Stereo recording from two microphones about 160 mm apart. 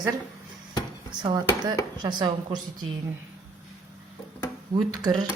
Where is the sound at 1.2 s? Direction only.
30° right (ahead or behind).